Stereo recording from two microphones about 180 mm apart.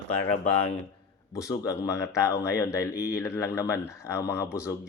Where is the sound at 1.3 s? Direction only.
15° left (ahead or behind).